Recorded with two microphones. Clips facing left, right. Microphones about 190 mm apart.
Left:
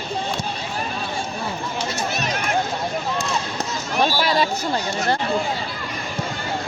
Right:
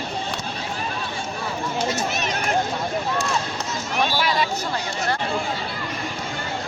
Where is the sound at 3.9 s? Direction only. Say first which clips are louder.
Left 3 dB; 35° left (ahead or behind).